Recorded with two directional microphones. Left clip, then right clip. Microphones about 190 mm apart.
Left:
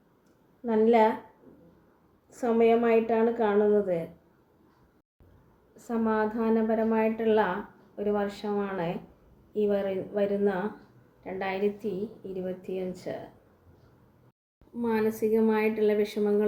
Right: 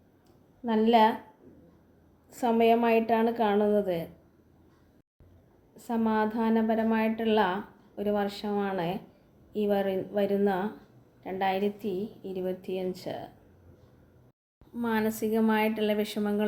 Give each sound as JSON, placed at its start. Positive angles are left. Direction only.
{"t": 0.6, "sound": "a woman's voice", "side_deg": -45}
{"t": 2.3, "sound": "a woman's voice", "side_deg": -45}
{"t": 5.7, "sound": "a woman's voice", "side_deg": -40}
{"t": 14.8, "sound": "a woman's voice", "side_deg": -50}